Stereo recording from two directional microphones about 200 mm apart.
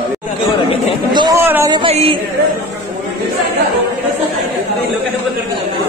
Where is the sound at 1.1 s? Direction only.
20° right (ahead or behind).